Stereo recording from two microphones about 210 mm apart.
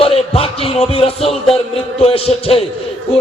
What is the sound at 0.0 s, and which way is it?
Music, 25° left (ahead or behind).